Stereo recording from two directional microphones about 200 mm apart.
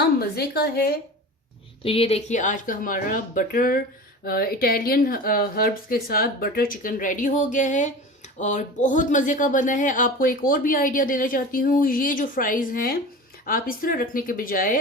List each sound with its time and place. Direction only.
0.2 s speech: 50° left (ahead or behind)
1.8 s speech: 30° left (ahead or behind); by 14.8 s 45° left (ahead or behind)